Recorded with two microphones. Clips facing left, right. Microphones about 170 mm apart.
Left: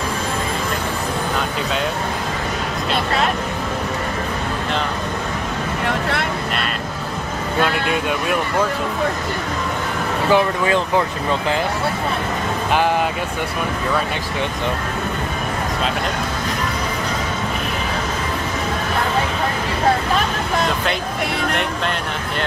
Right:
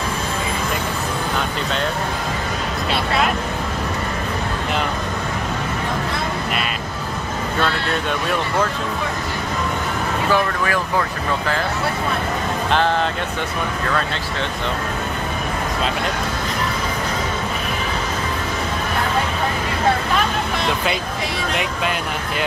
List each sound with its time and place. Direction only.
5.9 s speech: 70° left (ahead or behind)
7.6 s speech: 10° left (ahead or behind)
10.3 s speech: 20° left (ahead or behind)